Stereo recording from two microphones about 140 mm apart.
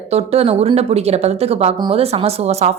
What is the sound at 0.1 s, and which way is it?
A woman's voice, 45° right (ahead or behind).